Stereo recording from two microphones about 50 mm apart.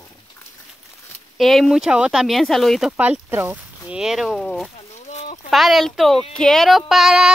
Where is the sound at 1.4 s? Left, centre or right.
Centre.